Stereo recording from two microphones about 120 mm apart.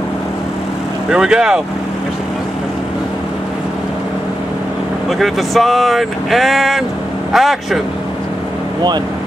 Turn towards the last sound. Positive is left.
turn(degrees=0)  # may be behind; listen again after turning